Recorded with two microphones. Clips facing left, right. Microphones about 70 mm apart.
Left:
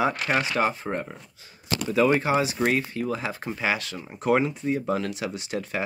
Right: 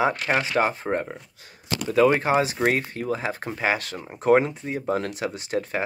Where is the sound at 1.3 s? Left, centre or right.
Right.